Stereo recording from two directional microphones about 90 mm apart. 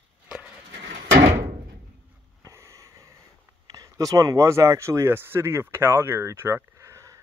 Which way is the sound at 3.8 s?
40° right (ahead or behind).